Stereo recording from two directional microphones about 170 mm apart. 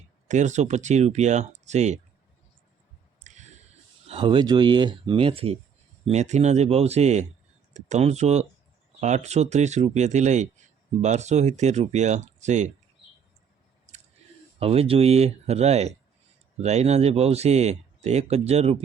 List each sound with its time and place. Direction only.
0.3 s speech: 45° right (ahead or behind)
3.2 s squish: 45° right (ahead or behind)
4.0 s speech: 30° right (ahead or behind)
14.6 s speech: 35° right (ahead or behind)